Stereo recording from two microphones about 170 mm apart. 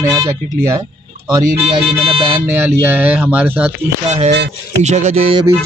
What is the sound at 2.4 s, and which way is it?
A man's voice, 15° right (ahead or behind).